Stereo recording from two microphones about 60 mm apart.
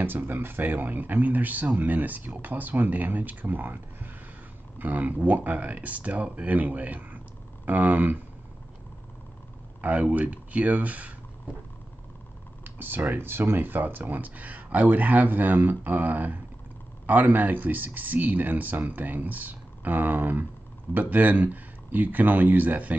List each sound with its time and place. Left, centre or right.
0.0 s speech: right
9.8 s speech: right
12.6 s speech: right